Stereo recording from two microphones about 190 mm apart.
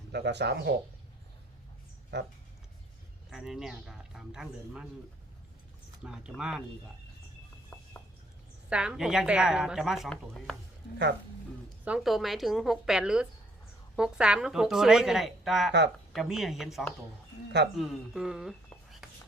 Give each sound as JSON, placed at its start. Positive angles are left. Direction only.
{"t": 0.1, "sound": "speech", "side_deg": -65}
{"t": 2.1, "sound": "speech", "side_deg": -65}
{"t": 3.2, "sound": "a woman's voice", "side_deg": 0}
{"t": 6.0, "sound": "a woman's voice", "side_deg": -5}
{"t": 7.7, "sound": "a sound", "side_deg": 10}
{"t": 8.7, "sound": "a woman's voice", "side_deg": -5}
{"t": 11.9, "sound": "a woman's voice", "side_deg": 0}